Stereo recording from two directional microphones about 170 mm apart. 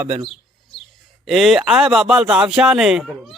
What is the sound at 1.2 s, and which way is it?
Speech, centre (ahead or behind).